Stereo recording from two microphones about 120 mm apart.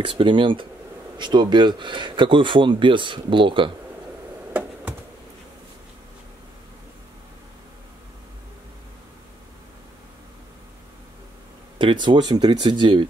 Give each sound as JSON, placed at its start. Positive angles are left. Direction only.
{"t": 0.0, "sound": "speech", "side_deg": -45}
{"t": 11.8, "sound": "speech", "side_deg": -40}